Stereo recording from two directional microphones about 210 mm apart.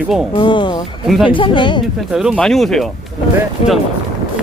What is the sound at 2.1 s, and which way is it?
Speech, 5° right (ahead or behind).